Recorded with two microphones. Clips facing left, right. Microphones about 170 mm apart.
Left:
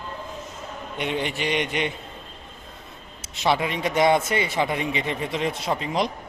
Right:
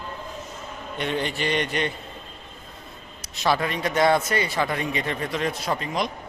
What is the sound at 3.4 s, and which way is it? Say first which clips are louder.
Speech: left 1 dB; 20° left (ahead or behind).